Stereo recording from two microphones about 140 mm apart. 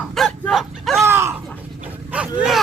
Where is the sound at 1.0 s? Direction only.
20° right (ahead or behind).